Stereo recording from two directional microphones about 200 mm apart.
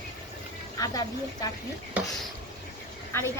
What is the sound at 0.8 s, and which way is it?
Speech, 20° left (ahead or behind).